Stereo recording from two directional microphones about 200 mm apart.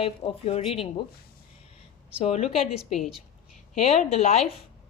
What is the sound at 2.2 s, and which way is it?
Speech, 30° left (ahead or behind).